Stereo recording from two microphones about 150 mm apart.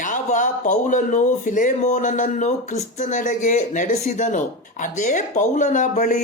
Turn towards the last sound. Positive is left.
turn(degrees=65)  # may be behind; listen again after turning